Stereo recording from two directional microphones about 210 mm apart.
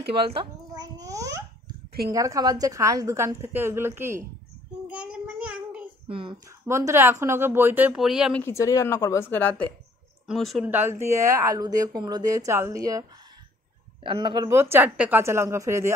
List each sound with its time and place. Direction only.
0.4 s babbling: 15° right (ahead or behind)
2.1 s speech: 15° right (ahead or behind)
4.8 s child singing: 5° right (ahead or behind)
6.0 s speech: 25° right (ahead or behind)
6.7 s speech: 15° right (ahead or behind)
8.4 s a woman's voice: 10° left (ahead or behind); by 13.0 s 15° right (ahead or behind)
14.0 s speech: 20° right (ahead or behind)